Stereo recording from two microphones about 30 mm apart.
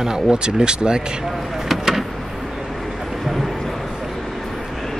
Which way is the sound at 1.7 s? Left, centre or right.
Centre.